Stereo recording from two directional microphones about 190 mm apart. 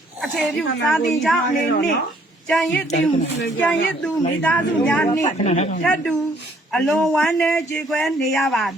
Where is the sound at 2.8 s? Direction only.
35° left (ahead or behind).